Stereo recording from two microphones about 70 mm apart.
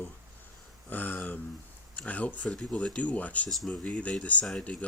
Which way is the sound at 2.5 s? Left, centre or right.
Centre.